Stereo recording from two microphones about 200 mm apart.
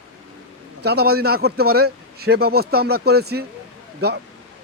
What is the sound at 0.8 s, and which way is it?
A man's voice, 55° right (ahead or behind).